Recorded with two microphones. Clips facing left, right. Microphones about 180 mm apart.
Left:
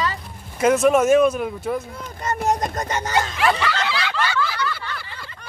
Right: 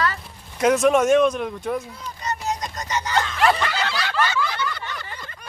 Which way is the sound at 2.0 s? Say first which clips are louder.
Left 4 dB; 50° left (ahead or behind).